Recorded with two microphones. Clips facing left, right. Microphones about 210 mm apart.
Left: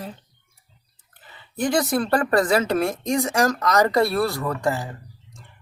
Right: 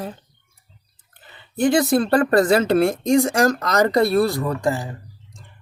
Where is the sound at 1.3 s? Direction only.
25° right (ahead or behind).